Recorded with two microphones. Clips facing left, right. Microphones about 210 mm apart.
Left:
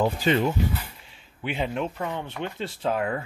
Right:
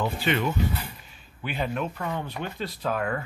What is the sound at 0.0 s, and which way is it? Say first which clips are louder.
Speech: left 4 dB; 35° left (ahead or behind).